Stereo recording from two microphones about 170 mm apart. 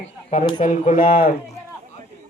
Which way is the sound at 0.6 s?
45° left (ahead or behind).